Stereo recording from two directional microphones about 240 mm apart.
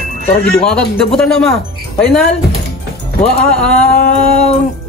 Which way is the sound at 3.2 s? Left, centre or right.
Centre.